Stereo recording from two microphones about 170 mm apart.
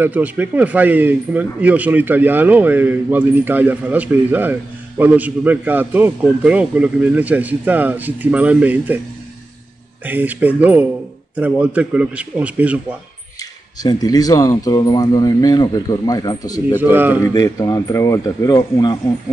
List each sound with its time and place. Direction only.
0.0 s speech: 10° right (ahead or behind)
10.0 s speech: 10° right (ahead or behind)
13.8 s speech: 20° left (ahead or behind)
16.7 s speech: 10° right (ahead or behind)
17.3 s speech: 20° left (ahead or behind)